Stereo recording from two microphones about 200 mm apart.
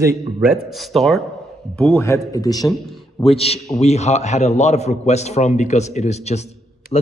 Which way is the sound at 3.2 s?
30° left (ahead or behind).